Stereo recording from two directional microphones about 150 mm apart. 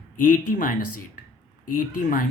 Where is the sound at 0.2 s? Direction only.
65° left (ahead or behind).